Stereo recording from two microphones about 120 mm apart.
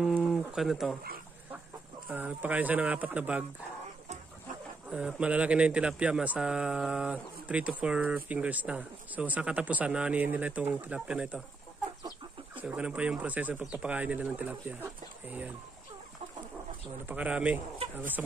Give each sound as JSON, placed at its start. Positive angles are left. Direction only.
{"t": 0.0, "sound": "speech", "side_deg": 0}
{"t": 2.0, "sound": "speech", "side_deg": -15}
{"t": 4.8, "sound": "speech", "side_deg": -10}
{"t": 12.5, "sound": "speech", "side_deg": -10}
{"t": 17.0, "sound": "speech", "side_deg": -10}